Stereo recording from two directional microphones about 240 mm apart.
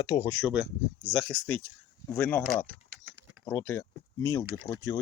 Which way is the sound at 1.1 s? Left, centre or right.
Centre.